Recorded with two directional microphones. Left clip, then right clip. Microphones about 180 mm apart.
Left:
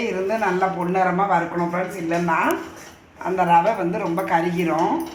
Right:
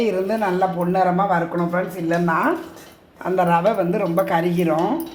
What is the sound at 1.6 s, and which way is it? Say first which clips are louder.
Speech: right 1 dB; 65° right (ahead or behind).